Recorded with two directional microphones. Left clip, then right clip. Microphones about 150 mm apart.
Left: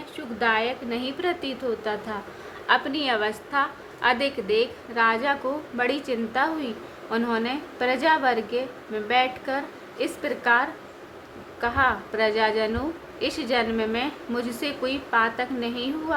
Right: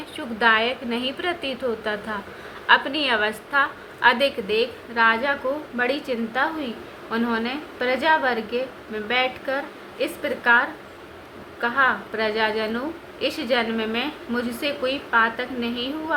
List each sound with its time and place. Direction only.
0.3 s a woman's voice: 20° left (ahead or behind)